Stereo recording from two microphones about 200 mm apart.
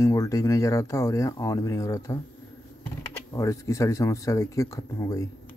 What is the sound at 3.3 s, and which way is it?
Speech, 15° left (ahead or behind).